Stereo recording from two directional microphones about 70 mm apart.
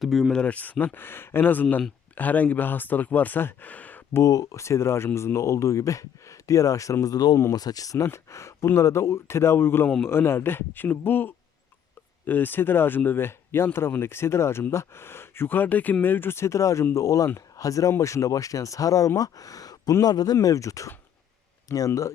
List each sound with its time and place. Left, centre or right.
0.0 s speech: centre
0.4 s speech: left
4.2 s speech: left
4.6 s speech: left
7.0 s speech: left
8.0 s speech: left